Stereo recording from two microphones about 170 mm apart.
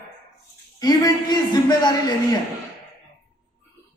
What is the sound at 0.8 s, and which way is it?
A woman's voice, 25° left (ahead or behind).